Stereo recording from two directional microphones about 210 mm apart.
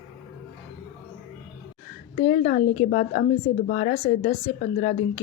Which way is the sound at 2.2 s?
35° left (ahead or behind).